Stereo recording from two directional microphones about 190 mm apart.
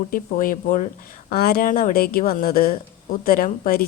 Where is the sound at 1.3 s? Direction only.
55° left (ahead or behind).